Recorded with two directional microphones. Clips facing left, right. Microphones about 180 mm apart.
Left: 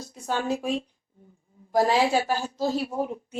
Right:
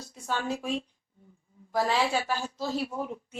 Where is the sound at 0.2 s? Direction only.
40° left (ahead or behind).